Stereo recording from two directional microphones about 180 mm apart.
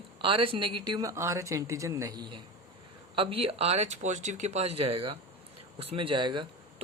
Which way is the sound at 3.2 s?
30° right (ahead or behind).